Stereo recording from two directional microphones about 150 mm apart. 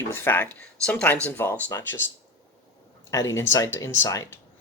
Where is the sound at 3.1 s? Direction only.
20° left (ahead or behind).